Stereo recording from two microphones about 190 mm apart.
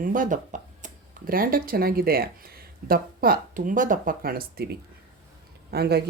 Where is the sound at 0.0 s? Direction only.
45° right (ahead or behind).